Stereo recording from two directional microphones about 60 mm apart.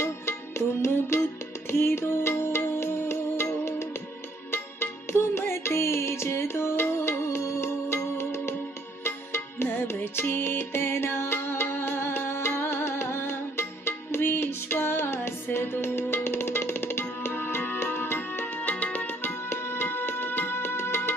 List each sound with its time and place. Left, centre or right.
0.0 s music: left
4.5 s music: left
18.6 s music: left
19.5 s music: left